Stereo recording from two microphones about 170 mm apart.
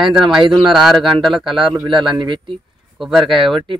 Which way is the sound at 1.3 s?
30° right (ahead or behind).